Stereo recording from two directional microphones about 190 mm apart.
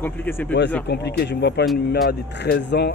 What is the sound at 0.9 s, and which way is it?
Speech, 60° left (ahead or behind).